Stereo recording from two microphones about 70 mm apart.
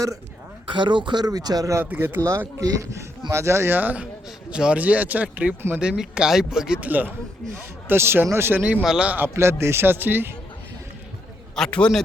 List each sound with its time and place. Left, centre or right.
0.9 s speech: right
1.8 s speech: right
2.6 s speech: right
3.8 s speech: right; by 6.7 s centre
6.8 s speech: right
7.5 s speech: right
8.8 s speech: centre
9.0 s speech: right
11.5 s a man's voice: centre